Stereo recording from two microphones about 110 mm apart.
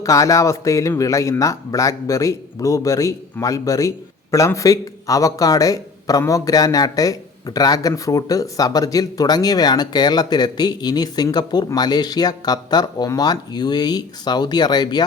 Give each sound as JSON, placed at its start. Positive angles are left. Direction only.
{"t": 0.0, "sound": "a man's voice", "side_deg": 30}